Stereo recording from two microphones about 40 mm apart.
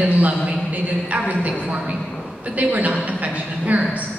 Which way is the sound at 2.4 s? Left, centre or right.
Right.